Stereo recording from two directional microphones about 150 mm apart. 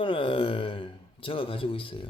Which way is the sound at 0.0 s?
35° left (ahead or behind).